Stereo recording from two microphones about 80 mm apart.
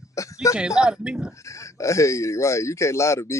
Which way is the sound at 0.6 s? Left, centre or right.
Centre.